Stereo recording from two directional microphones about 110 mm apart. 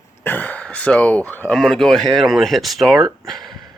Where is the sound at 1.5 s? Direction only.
5° left (ahead or behind).